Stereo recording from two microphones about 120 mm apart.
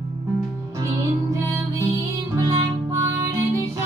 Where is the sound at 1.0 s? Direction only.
25° right (ahead or behind).